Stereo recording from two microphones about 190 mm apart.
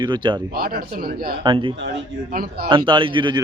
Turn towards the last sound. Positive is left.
turn(degrees=-25)  # may be behind; listen again after turning